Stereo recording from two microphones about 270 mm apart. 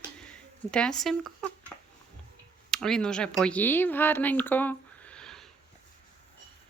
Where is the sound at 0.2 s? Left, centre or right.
Centre.